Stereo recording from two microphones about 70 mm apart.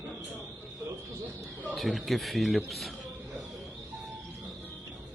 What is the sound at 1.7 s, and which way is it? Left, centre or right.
A man's voice, centre.